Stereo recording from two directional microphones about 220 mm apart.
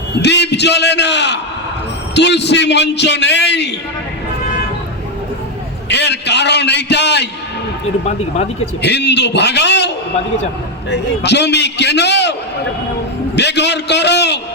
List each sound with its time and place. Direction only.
0.2 s a man's voice: 50° left (ahead or behind)
5.9 s a man's voice: 50° left (ahead or behind)
8.8 s a man's voice: 50° left (ahead or behind)
13.3 s a man's voice: 50° left (ahead or behind)